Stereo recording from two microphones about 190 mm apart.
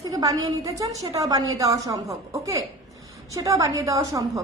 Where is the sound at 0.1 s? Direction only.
20° right (ahead or behind).